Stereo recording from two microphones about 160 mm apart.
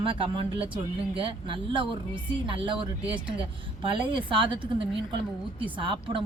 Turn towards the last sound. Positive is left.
turn(degrees=-30)  # may be behind; listen again after turning